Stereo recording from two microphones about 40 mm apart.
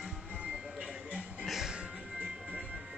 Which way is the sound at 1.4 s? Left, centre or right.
Centre.